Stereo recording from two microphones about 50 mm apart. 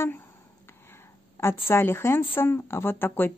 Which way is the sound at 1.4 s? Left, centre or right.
Left.